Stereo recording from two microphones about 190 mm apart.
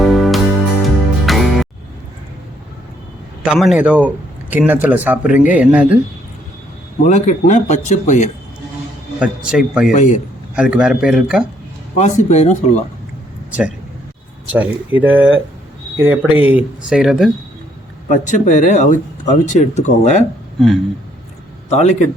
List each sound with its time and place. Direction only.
0.0 s music: centre (ahead or behind)
3.4 s speech: centre (ahead or behind)
7.0 s speech: 40° left (ahead or behind)
9.1 s speech: 5° right (ahead or behind)
9.9 s speech: 40° left (ahead or behind)
10.5 s speech: 5° right (ahead or behind)
11.9 s speech: 40° left (ahead or behind)
14.5 s speech: 10° right (ahead or behind)
18.1 s speech: 40° left (ahead or behind)
21.7 s speech: 35° left (ahead or behind)